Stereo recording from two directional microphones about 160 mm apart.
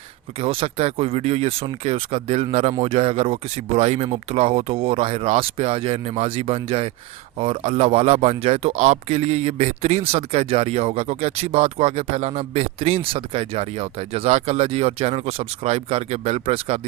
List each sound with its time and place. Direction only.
0.3 s speech: 35° right (ahead or behind)